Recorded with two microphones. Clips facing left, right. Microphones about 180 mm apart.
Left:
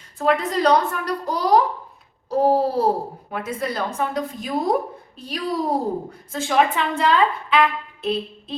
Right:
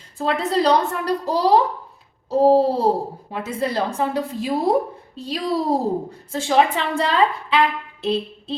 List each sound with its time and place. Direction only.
0.2 s a child's voice: 30° right (ahead or behind)
8.0 s music: 30° right (ahead or behind)